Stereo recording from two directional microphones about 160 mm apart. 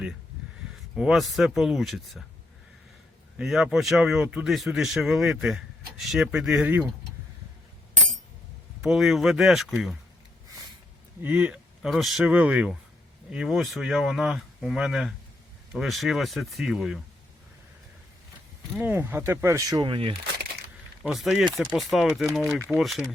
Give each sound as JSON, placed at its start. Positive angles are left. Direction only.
{"t": 0.9, "sound": "speech", "side_deg": 0}
{"t": 3.3, "sound": "speech", "side_deg": 0}
{"t": 8.8, "sound": "speech", "side_deg": 0}
{"t": 11.2, "sound": "speech", "side_deg": -10}
{"t": 18.8, "sound": "speech", "side_deg": -10}
{"t": 21.0, "sound": "speech", "side_deg": 0}